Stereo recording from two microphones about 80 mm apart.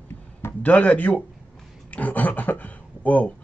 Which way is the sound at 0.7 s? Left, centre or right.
Centre.